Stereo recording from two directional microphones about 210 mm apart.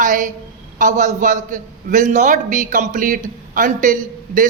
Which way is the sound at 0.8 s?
35° right (ahead or behind).